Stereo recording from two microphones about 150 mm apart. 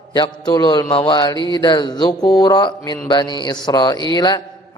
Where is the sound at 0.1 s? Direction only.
30° left (ahead or behind).